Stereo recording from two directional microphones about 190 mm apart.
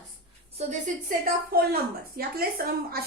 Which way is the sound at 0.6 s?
40° right (ahead or behind).